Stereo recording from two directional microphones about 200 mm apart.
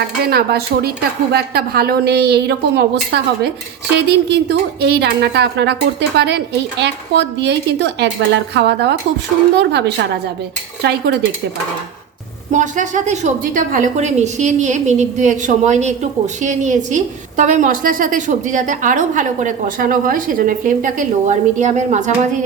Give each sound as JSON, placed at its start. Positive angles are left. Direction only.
{"t": 0.2, "sound": "a woman's voice", "side_deg": -50}
{"t": 12.5, "sound": "a woman's voice", "side_deg": -40}